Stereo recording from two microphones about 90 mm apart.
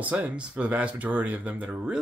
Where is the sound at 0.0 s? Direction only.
15° right (ahead or behind).